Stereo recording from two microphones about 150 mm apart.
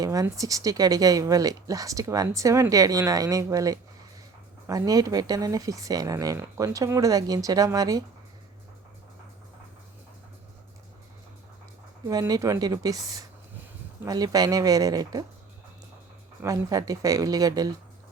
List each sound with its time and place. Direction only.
0.0 s speech: 20° right (ahead or behind)
12.0 s speech: 25° right (ahead or behind)
16.4 s speech: 25° right (ahead or behind)